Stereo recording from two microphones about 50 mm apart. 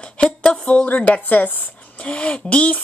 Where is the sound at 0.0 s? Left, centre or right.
Centre.